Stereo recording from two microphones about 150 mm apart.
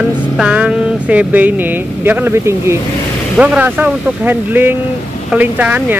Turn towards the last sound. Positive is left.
turn(degrees=-10)  # may be behind; listen again after turning